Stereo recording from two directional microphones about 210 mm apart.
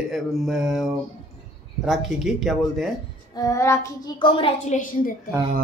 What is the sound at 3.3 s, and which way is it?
A woman's voice, 15° left (ahead or behind).